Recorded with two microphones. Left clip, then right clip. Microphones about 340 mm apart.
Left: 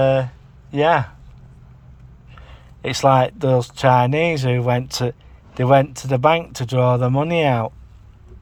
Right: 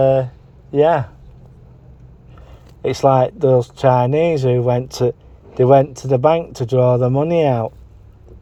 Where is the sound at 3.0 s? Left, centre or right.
Left.